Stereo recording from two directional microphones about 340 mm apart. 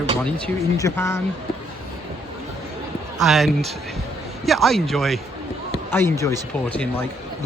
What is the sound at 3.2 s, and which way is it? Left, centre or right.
Speech, centre.